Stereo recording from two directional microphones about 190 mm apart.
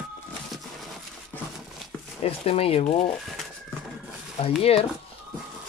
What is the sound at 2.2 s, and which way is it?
Speech, 30° left (ahead or behind).